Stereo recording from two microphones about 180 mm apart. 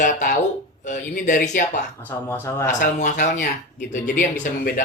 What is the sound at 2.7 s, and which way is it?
Speech, 45° left (ahead or behind).